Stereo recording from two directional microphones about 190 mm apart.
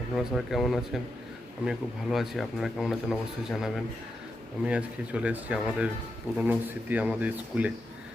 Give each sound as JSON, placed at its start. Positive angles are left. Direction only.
{"t": 0.3, "sound": "speech", "side_deg": 0}